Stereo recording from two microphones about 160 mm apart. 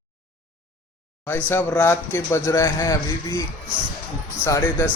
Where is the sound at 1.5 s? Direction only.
10° left (ahead or behind).